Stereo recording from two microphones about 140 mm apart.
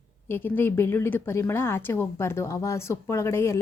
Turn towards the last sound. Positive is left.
turn(degrees=20)  # may be behind; listen again after turning